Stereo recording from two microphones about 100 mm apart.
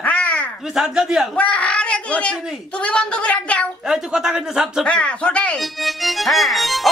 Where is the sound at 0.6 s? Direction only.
5° right (ahead or behind).